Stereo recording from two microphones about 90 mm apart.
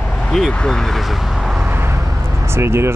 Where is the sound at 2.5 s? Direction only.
30° right (ahead or behind).